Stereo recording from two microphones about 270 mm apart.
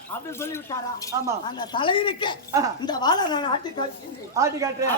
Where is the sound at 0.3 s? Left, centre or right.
Centre.